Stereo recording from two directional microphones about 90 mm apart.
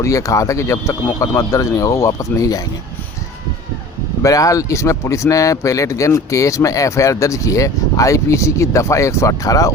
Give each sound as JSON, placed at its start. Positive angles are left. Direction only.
{"t": 0.0, "sound": "speech", "side_deg": 40}
{"t": 4.2, "sound": "speech", "side_deg": 40}